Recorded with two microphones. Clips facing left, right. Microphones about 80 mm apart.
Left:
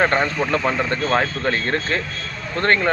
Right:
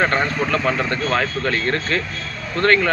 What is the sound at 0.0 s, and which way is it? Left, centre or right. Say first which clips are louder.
Speech: left 1 dB; left.